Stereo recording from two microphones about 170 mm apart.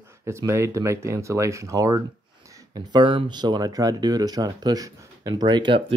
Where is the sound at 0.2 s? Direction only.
15° right (ahead or behind).